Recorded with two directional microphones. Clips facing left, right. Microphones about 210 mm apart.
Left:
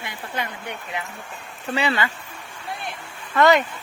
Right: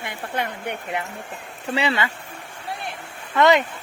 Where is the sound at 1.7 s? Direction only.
25° right (ahead or behind).